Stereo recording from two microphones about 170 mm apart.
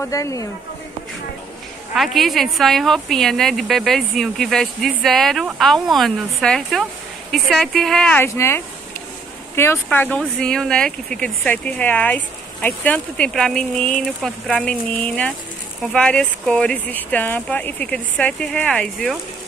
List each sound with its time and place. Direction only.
0.0 s speech: 20° left (ahead or behind)
2.0 s speech: centre (ahead or behind)